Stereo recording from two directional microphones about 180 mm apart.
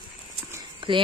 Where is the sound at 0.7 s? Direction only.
30° right (ahead or behind).